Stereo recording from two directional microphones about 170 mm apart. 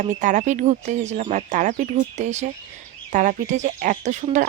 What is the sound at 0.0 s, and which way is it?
Speech, 45° right (ahead or behind).